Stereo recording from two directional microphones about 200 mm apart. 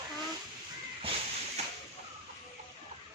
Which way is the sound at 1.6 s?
30° right (ahead or behind).